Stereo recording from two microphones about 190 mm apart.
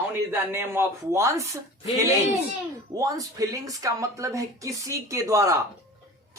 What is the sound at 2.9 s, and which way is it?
Speech, 20° right (ahead or behind).